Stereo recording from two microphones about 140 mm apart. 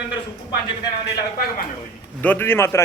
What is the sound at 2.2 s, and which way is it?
Speech, 15° left (ahead or behind).